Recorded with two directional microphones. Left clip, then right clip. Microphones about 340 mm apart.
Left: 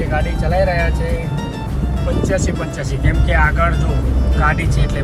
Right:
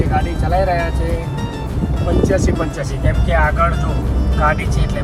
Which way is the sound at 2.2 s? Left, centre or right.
Centre.